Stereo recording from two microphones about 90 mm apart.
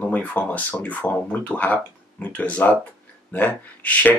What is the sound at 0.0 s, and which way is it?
Speech, 20° left (ahead or behind).